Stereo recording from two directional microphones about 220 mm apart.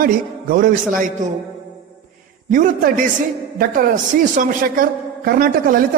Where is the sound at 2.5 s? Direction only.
35° right (ahead or behind).